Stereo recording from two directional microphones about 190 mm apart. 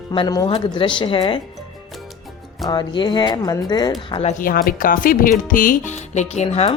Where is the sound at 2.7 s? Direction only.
25° left (ahead or behind).